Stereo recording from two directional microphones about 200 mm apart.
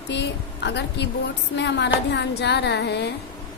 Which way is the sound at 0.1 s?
60° left (ahead or behind).